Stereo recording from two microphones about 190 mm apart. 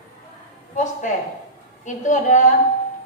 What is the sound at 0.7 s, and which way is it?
A woman's voice, 40° left (ahead or behind).